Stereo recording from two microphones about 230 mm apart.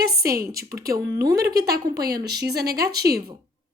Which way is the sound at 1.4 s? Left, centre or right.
Right.